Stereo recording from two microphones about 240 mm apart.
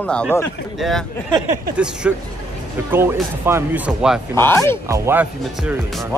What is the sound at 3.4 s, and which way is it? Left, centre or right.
Speech, centre.